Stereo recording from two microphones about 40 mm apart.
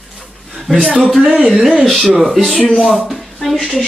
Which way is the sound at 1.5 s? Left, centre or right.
Centre.